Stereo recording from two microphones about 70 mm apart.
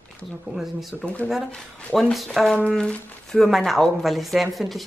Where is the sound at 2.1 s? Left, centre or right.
Centre.